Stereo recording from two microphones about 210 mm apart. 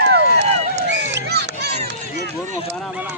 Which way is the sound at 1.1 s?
55° right (ahead or behind).